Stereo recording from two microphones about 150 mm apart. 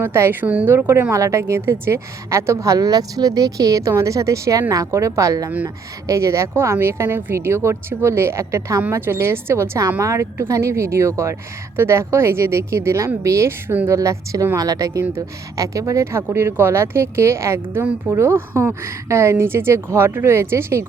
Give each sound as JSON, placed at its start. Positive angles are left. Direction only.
{"t": 0.0, "sound": "a woman's voice", "side_deg": -15}